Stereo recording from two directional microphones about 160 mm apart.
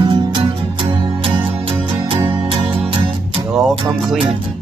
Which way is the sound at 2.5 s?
35° right (ahead or behind).